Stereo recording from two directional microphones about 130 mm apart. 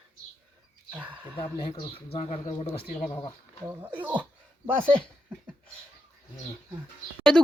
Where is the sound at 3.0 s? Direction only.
20° left (ahead or behind).